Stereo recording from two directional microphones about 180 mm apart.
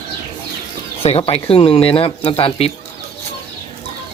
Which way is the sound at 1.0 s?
35° left (ahead or behind).